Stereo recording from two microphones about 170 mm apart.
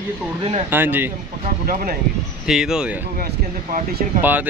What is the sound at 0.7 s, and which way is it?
Speech, 10° right (ahead or behind).